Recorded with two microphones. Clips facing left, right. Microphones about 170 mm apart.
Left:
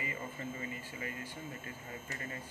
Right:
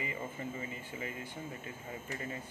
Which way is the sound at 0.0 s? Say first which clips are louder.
Right 2 dB; 20° right (ahead or behind).